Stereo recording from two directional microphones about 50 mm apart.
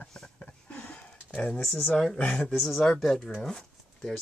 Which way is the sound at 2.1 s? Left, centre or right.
Left.